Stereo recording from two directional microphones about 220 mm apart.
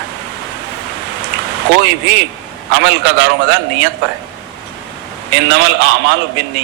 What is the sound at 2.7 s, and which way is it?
A man's voice, 55° right (ahead or behind).